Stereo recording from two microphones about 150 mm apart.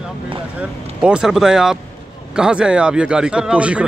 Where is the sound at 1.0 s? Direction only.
5° right (ahead or behind).